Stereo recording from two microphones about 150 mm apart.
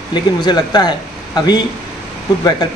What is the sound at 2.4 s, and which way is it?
Speech, 25° left (ahead or behind).